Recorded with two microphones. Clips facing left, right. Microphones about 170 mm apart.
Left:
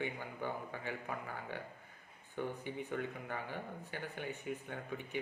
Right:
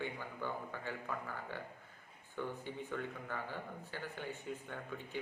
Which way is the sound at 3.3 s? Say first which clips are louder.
Left 1 dB; 20° left (ahead or behind).